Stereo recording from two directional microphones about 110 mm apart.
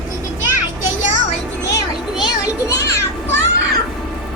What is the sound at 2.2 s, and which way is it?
Music, 40° left (ahead or behind).